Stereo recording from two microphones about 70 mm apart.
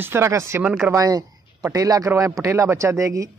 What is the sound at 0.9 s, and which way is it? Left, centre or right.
A man's voice, right.